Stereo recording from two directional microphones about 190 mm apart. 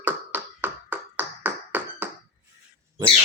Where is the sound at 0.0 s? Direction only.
10° right (ahead or behind).